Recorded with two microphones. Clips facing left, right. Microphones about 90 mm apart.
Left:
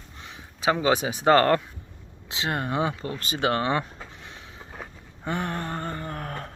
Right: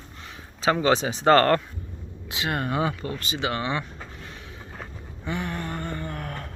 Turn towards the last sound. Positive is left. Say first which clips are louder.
# even
turn(degrees=30)  # may be behind; listen again after turning